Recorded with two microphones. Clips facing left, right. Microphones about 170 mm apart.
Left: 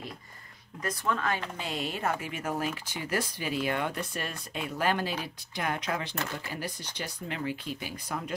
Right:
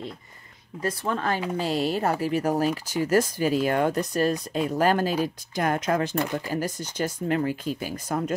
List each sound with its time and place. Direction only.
0.8 s speech: 35° right (ahead or behind)